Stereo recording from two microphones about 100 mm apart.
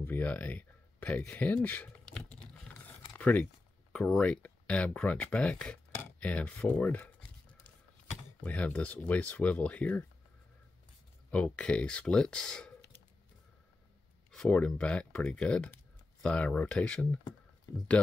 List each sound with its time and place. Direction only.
0.0 s speech: 15° left (ahead or behind)
2.0 s a sound: 5° left (ahead or behind)
3.1 s a sound: 15° left (ahead or behind)
3.9 s speech: 10° left (ahead or behind)
11.2 s speech: 10° left (ahead or behind)
14.3 s speech: 10° left (ahead or behind)